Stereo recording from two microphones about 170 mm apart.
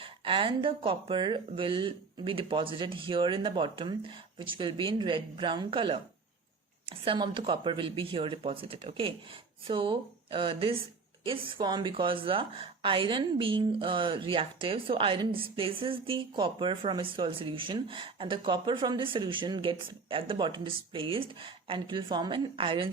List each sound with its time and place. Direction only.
0.0 s a woman's voice: 30° right (ahead or behind)